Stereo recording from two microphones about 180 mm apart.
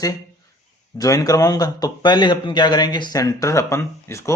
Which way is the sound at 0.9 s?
20° left (ahead or behind).